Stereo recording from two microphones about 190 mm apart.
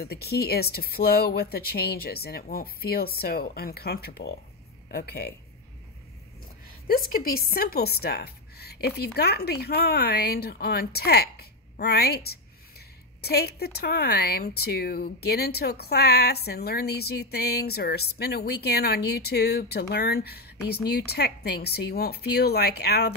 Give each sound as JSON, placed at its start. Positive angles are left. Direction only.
{"t": 0.0, "sound": "speech", "side_deg": 55}
{"t": 6.9, "sound": "speech", "side_deg": 50}